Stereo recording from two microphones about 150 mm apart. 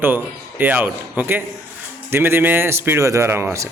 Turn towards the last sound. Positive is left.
turn(degrees=-15)  # may be behind; listen again after turning